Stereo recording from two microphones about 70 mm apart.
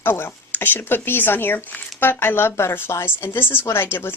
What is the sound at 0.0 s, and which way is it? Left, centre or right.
Speech, left.